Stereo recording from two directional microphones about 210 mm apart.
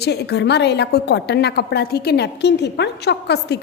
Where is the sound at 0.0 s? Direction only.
50° left (ahead or behind).